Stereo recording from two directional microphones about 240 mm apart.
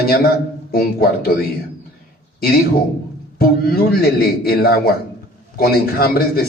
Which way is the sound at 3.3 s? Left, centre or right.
Left.